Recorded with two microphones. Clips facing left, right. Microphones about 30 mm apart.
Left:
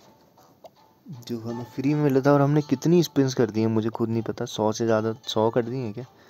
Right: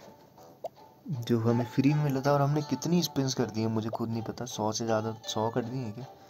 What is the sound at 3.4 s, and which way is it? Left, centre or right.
Speech, left.